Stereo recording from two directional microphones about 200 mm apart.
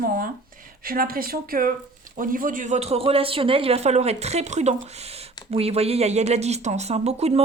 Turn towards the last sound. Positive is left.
turn(degrees=-30)  # may be behind; listen again after turning